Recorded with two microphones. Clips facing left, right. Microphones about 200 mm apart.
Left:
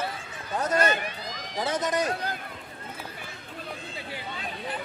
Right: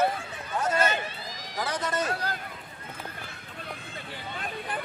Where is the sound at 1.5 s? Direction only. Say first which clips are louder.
Left 3 dB; 25° left (ahead or behind).